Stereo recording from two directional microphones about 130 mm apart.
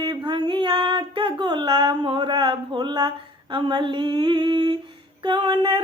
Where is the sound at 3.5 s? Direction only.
40° right (ahead or behind).